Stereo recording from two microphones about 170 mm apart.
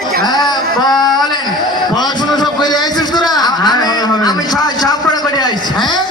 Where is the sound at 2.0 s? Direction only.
25° left (ahead or behind).